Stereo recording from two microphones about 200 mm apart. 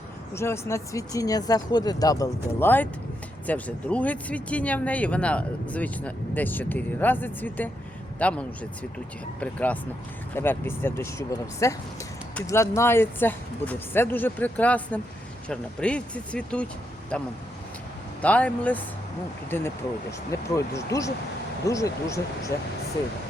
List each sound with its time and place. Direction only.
0.3 s speech: 15° left (ahead or behind)
18.2 s speech: 5° left (ahead or behind)